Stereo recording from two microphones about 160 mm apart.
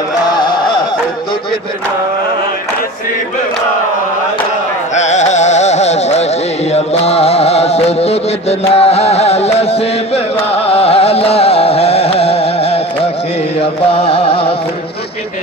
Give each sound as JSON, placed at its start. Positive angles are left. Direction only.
{"t": 0.3, "sound": "carnatic music", "side_deg": 30}
{"t": 4.9, "sound": "carnatic music", "side_deg": 45}
{"t": 6.7, "sound": "music", "side_deg": 40}